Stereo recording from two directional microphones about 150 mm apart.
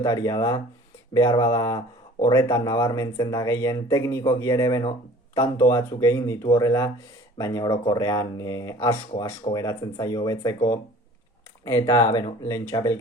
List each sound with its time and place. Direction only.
0.0 s speech: 25° left (ahead or behind)